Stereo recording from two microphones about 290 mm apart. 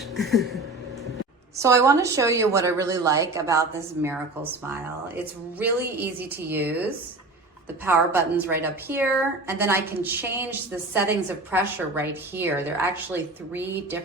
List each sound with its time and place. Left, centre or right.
0.2 s a sound: centre
1.5 s a woman's voice: centre
4.7 s a woman's voice: centre